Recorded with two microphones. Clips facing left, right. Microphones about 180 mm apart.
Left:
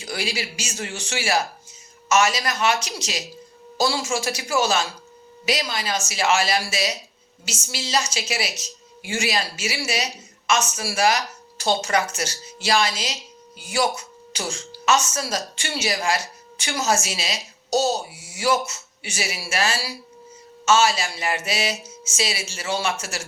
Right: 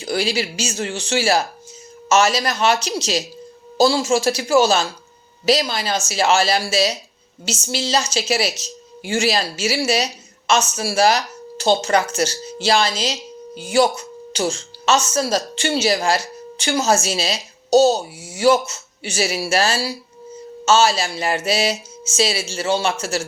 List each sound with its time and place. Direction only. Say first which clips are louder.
0.0 s a woman's voice: right 7 dB; 30° right (ahead or behind)